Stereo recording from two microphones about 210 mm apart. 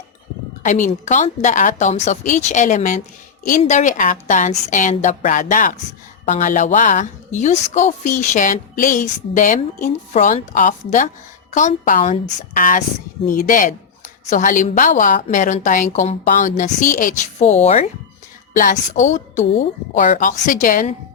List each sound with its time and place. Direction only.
0.6 s a woman's voice: 35° left (ahead or behind)